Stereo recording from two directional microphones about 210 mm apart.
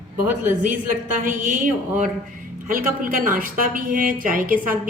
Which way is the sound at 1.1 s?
40° right (ahead or behind).